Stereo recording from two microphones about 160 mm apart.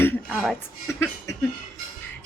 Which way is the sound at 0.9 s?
15° left (ahead or behind).